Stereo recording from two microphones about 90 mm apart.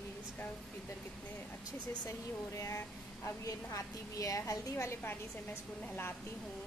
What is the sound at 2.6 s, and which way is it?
A woman's voice, 30° left (ahead or behind).